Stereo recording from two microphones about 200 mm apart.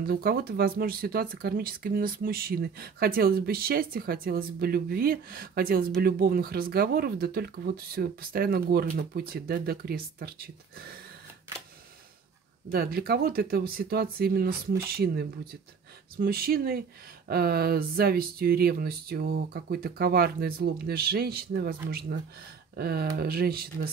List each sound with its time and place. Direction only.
0.0 s speech: 50° right (ahead or behind)
12.7 s speech: 50° right (ahead or behind)
22.8 s speech: 50° right (ahead or behind)